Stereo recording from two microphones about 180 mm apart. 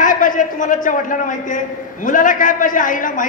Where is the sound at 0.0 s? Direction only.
50° left (ahead or behind).